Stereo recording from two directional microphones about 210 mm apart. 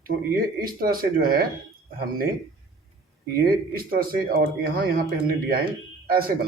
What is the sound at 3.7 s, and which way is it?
Speech, 45° right (ahead or behind).